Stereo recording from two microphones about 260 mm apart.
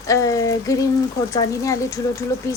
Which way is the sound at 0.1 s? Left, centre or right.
Centre.